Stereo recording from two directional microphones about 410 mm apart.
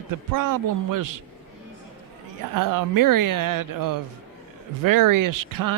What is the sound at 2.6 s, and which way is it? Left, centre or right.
A man's voice, right.